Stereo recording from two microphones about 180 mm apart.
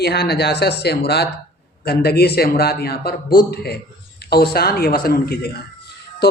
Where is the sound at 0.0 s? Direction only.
65° left (ahead or behind).